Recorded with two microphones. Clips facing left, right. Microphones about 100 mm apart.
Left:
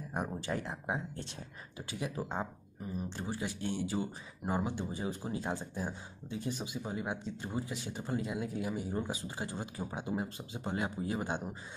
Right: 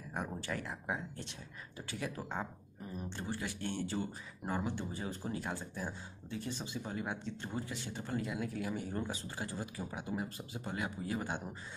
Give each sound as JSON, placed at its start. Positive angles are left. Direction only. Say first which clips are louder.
{"t": 0.4, "sound": "speech", "louder": "left 3 dB", "side_deg": 20}